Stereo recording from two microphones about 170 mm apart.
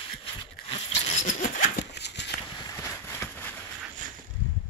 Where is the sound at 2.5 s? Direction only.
25° left (ahead or behind).